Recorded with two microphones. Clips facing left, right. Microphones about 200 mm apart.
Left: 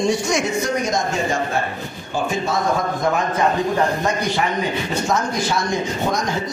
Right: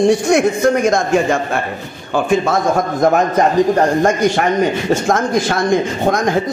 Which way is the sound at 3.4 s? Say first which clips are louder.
Right 6 dB; 45° right (ahead or behind).